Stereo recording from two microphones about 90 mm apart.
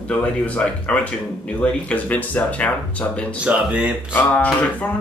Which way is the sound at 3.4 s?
15° right (ahead or behind).